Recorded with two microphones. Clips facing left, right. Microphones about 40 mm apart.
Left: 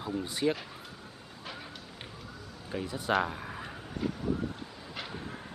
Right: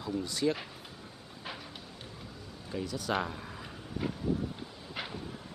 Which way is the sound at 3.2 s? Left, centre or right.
Centre.